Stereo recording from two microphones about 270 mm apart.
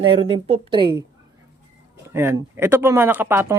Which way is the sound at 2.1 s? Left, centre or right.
Centre.